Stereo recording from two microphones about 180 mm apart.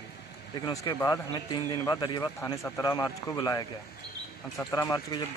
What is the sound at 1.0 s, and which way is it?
A man's voice, 20° left (ahead or behind).